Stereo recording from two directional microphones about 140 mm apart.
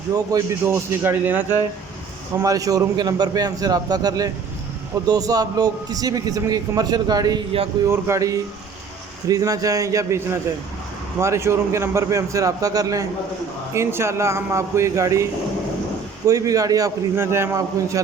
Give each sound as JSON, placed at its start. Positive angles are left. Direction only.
{"t": 0.1, "sound": "a man's voice", "side_deg": -25}
{"t": 2.4, "sound": "a man's voice", "side_deg": -25}
{"t": 11.2, "sound": "a man's voice", "side_deg": -20}